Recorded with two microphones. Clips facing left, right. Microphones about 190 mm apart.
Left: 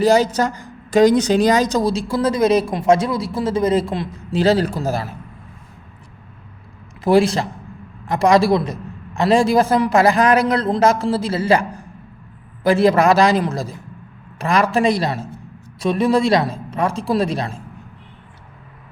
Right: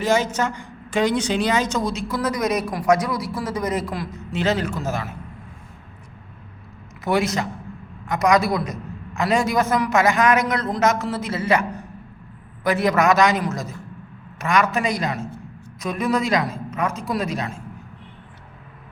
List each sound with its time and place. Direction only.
0.0 s a woman's voice: 35° left (ahead or behind)
7.0 s a woman's voice: 30° left (ahead or behind)